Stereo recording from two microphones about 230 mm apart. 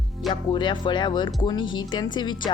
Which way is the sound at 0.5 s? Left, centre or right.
Left.